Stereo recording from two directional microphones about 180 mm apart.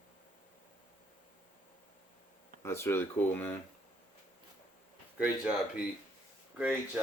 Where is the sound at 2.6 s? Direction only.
15° left (ahead or behind).